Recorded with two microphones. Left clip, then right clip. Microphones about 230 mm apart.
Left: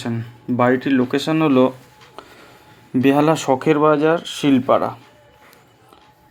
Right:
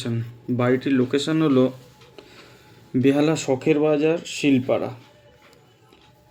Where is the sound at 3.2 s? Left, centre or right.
Left.